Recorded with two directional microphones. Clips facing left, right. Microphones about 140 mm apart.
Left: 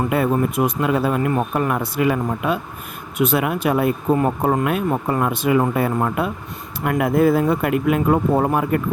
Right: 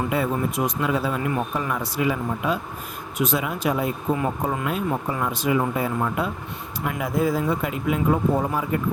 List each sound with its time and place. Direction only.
0.1 s speech: 55° left (ahead or behind)